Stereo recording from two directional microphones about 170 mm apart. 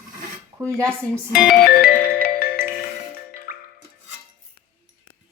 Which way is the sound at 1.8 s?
60° left (ahead or behind).